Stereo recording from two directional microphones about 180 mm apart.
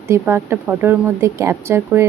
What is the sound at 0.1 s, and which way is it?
Speech, 10° right (ahead or behind).